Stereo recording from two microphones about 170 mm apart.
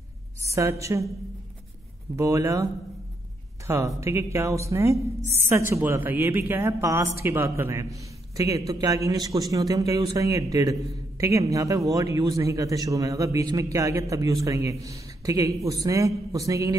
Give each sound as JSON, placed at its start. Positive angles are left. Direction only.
{"t": 0.6, "sound": "speech", "side_deg": -15}
{"t": 2.1, "sound": "a man's voice", "side_deg": -15}